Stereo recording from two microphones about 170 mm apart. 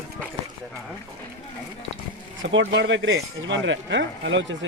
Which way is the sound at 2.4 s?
90° right.